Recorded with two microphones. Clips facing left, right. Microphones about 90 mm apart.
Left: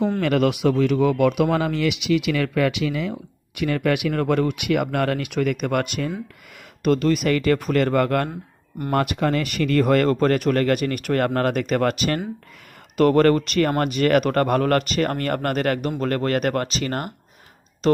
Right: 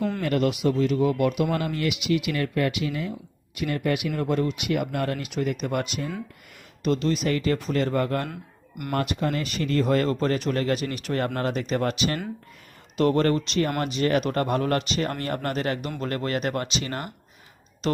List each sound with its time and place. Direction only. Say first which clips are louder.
0.2 s speech: left 4 dB; 90° left; by 12.2 s 45° left (ahead or behind)
13.0 s speech: left 5 dB; 60° left (ahead or behind); by 18.0 s 40° left (ahead or behind)